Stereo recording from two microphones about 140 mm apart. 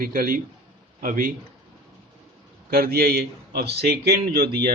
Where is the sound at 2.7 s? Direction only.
90° right.